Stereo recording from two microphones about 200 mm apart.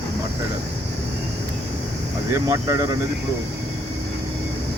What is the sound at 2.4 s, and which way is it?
Speech, 15° right (ahead or behind).